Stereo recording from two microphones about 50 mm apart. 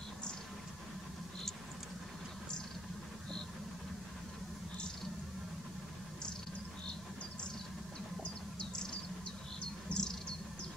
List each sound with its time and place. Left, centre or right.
9.8 s insect: centre